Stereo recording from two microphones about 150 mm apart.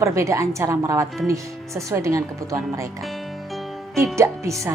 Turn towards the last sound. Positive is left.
turn(degrees=-20)  # may be behind; listen again after turning